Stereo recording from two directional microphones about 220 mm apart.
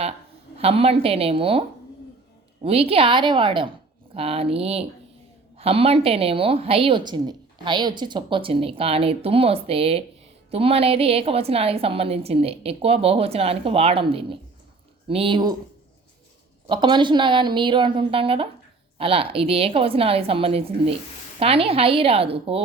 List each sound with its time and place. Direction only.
0.6 s a woman's voice: 25° right (ahead or behind)
2.6 s a woman's voice: 25° right (ahead or behind)
16.6 s a woman's voice: 20° right (ahead or behind)